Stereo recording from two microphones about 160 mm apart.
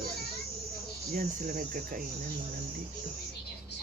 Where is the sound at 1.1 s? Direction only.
60° right (ahead or behind).